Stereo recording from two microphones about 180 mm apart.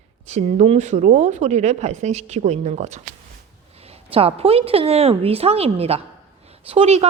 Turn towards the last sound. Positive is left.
turn(degrees=-35)  # may be behind; listen again after turning